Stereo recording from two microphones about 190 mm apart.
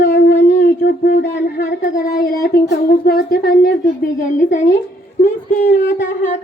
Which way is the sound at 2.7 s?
55° left (ahead or behind).